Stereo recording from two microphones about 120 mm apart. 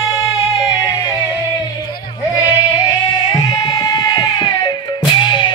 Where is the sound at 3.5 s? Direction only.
35° left (ahead or behind).